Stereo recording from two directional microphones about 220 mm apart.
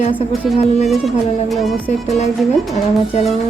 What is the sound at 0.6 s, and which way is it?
Speech, 30° left (ahead or behind).